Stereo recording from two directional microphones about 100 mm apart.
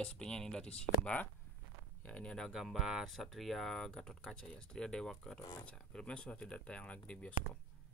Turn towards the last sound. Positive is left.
turn(degrees=15)  # may be behind; listen again after turning